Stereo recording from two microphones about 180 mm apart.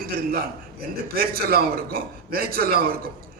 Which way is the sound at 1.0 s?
55° right (ahead or behind).